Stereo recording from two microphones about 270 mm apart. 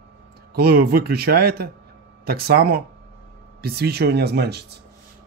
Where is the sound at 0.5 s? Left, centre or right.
Right.